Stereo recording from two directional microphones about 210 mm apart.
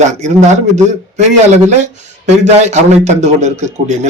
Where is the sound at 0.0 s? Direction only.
35° right (ahead or behind).